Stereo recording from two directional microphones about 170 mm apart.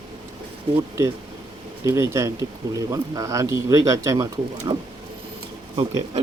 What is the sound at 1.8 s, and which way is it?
Speech, 15° right (ahead or behind).